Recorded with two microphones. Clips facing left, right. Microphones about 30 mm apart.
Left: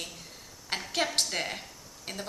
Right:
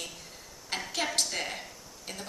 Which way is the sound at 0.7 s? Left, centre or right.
Left.